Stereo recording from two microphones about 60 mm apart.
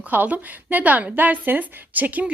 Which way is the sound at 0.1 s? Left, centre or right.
Right.